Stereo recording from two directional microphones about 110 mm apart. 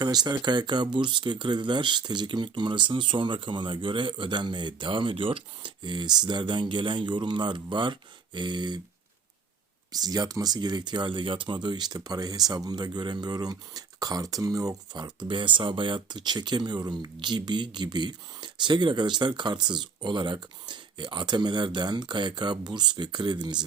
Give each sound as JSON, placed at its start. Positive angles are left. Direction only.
{"t": 0.0, "sound": "speech", "side_deg": -40}
{"t": 9.9, "sound": "speech", "side_deg": -35}
{"t": 15.3, "sound": "speech", "side_deg": -50}